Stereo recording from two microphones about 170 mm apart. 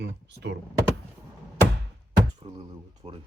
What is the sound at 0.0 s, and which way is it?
Speech, 90° right.